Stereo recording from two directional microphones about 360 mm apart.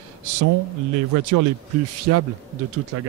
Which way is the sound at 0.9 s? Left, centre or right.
Right.